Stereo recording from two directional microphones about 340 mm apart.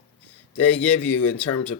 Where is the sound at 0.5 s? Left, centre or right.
Centre.